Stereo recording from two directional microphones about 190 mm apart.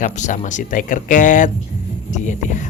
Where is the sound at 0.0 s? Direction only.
40° left (ahead or behind).